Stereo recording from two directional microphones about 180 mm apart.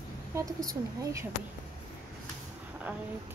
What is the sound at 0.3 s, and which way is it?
Speech, 15° right (ahead or behind).